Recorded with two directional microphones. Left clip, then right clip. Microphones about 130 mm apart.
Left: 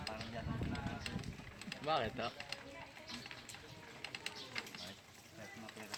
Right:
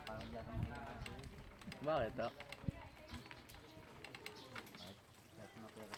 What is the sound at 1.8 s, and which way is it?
Speech, 50° right (ahead or behind).